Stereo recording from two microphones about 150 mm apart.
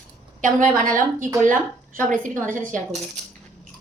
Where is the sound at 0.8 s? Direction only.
60° right (ahead or behind).